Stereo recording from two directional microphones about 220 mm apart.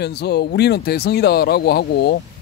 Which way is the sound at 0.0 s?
50° left (ahead or behind).